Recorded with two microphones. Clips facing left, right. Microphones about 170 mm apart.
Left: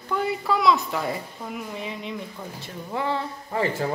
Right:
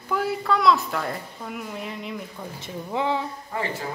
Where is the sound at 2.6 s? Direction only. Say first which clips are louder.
Right 2 dB; 15° right (ahead or behind).